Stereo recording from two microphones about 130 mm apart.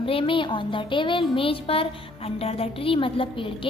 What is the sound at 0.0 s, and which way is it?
A woman's voice, 45° left (ahead or behind).